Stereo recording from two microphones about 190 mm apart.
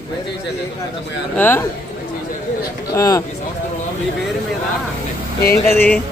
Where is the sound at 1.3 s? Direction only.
10° left (ahead or behind).